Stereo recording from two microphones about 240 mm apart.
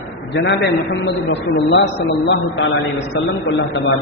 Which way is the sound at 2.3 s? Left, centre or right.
Left.